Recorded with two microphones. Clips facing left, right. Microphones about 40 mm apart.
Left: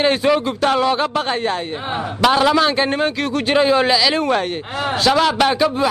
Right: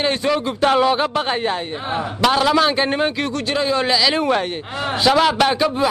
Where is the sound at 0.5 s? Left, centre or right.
Centre.